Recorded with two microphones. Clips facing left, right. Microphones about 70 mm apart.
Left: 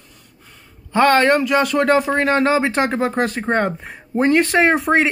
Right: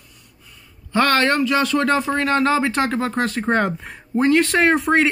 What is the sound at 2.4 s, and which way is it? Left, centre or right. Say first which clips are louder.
Speech: left 2 dB; centre.